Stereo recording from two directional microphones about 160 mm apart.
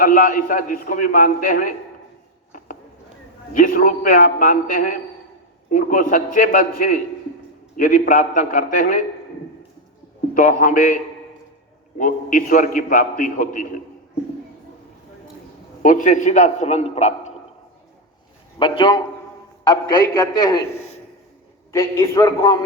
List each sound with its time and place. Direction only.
0.0 s a man's voice: 60° left (ahead or behind)
3.5 s a man's voice: 55° left (ahead or behind)
10.3 s a man's voice: 60° left (ahead or behind)
15.8 s a man's voice: 55° left (ahead or behind)
18.6 s a man's voice: 30° left (ahead or behind)
21.7 s a man's voice: 20° left (ahead or behind)